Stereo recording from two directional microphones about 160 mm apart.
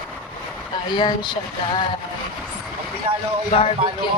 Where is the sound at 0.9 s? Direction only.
25° left (ahead or behind).